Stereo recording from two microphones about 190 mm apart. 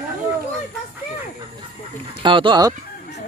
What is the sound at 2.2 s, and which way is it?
Speech, 25° right (ahead or behind).